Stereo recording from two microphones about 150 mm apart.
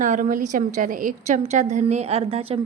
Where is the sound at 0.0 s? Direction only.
60° right (ahead or behind).